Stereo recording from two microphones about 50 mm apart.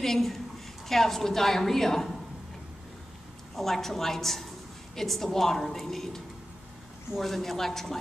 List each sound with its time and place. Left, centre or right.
0.0 s a woman's voice: centre
3.5 s a woman's voice: centre